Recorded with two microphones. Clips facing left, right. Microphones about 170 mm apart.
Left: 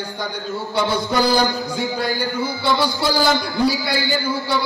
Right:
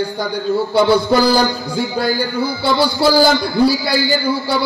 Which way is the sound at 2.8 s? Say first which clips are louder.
Right 7 dB; 35° right (ahead or behind).